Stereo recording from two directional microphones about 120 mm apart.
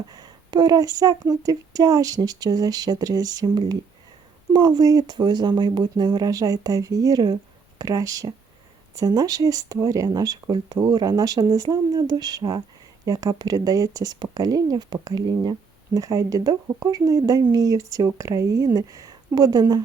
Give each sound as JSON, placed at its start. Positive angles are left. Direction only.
{"t": 0.1, "sound": "speech", "side_deg": -35}